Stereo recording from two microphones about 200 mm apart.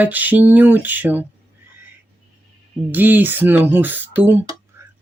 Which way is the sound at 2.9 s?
10° right (ahead or behind).